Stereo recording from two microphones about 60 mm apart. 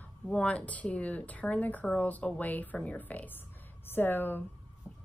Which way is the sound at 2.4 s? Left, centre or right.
Left.